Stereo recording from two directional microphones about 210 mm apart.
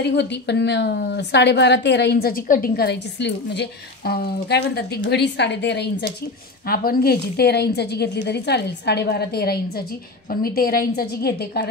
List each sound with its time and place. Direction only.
0.0 s a woman's voice: 55° left (ahead or behind)
6.6 s a woman's voice: 45° left (ahead or behind)